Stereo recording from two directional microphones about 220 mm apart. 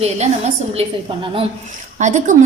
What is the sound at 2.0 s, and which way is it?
Speech, 35° right (ahead or behind).